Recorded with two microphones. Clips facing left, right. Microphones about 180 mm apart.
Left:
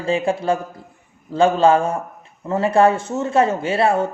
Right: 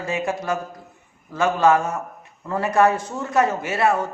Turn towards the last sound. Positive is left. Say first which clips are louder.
# left 3 dB
turn(degrees=30)  # may be behind; listen again after turning